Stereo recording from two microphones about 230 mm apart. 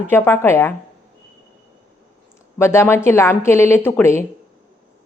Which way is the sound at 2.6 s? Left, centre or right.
Centre.